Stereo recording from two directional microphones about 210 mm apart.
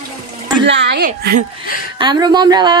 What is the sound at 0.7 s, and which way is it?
Speech, 50° right (ahead or behind).